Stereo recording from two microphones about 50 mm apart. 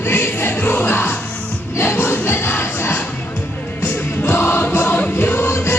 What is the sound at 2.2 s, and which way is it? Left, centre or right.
Crowd, left.